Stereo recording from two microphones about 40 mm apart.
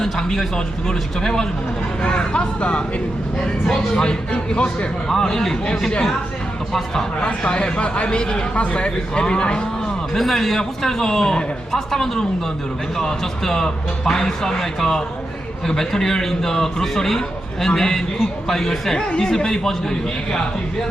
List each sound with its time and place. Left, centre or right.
0.0 s speech: centre
3.4 s speech: centre
5.0 s speech: centre
7.2 s speech: left
10.2 s speech: centre
18.9 s speech: left